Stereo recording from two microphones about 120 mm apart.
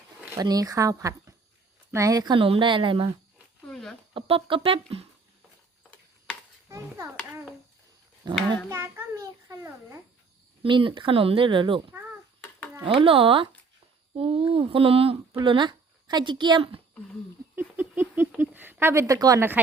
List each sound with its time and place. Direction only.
0.4 s a child's voice: 30° right (ahead or behind); by 3.1 s 45° right (ahead or behind)
3.7 s a sound: 5° left (ahead or behind)
4.1 s speech: 50° right (ahead or behind)
6.7 s a child's voice: 25° right (ahead or behind)
8.7 s a child's voice: 20° right (ahead or behind)
10.6 s speech: 45° right (ahead or behind)
12.8 s speech: 50° right (ahead or behind)
15.4 s a woman's voice: 40° right (ahead or behind)
17.5 s a sound: 15° right (ahead or behind)
18.3 s speech: 15° right (ahead or behind)